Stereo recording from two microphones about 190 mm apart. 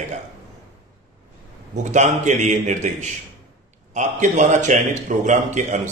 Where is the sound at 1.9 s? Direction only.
40° right (ahead or behind).